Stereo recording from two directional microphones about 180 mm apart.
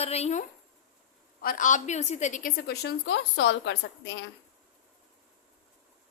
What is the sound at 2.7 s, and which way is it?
A woman's voice, 70° left (ahead or behind).